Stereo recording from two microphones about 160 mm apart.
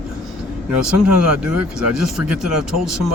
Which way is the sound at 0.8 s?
5° right (ahead or behind).